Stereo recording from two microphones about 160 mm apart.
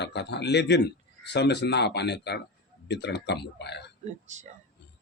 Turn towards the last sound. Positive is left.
turn(degrees=-50)  # may be behind; listen again after turning